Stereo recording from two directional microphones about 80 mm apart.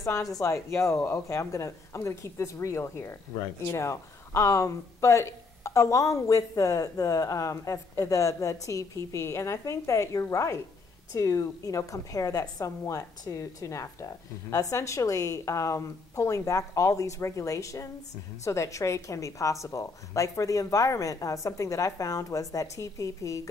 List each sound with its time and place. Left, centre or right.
0.0 s a woman's voice: left